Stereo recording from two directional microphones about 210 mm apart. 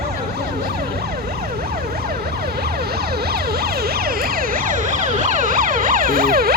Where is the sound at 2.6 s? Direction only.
50° right (ahead or behind).